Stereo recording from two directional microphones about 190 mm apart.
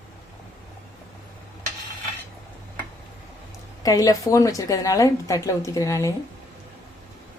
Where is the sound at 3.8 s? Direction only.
20° left (ahead or behind).